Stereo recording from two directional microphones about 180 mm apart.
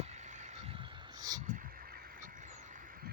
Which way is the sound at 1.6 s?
55° right (ahead or behind).